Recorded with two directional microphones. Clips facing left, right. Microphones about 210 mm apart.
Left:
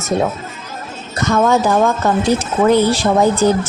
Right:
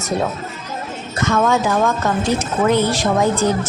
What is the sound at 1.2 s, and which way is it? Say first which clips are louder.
A woman's voice: left 3 dB; 35° left (ahead or behind).